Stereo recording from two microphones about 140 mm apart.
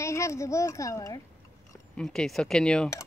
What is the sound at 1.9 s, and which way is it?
Speech, 5° left (ahead or behind).